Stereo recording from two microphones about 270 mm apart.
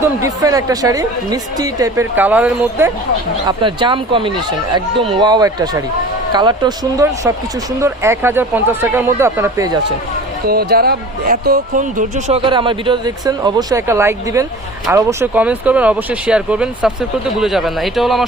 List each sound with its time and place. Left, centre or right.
0.0 s speech: centre
3.4 s speech: centre
10.4 s speech: right; by 18.3 s centre